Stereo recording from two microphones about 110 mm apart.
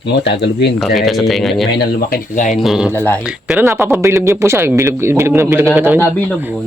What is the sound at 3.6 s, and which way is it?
Speech, 25° right (ahead or behind).